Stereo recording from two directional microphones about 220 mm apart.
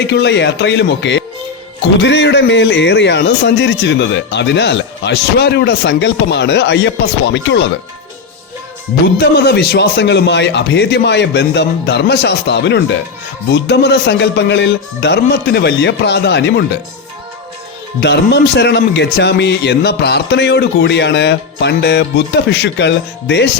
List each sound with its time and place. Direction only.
0.1 s a man's voice: 50° left (ahead or behind)
9.1 s a man's voice: 45° left (ahead or behind)
18.0 s a man's voice: 50° left (ahead or behind)